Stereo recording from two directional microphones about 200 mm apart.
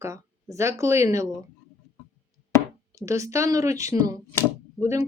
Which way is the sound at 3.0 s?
15° right (ahead or behind).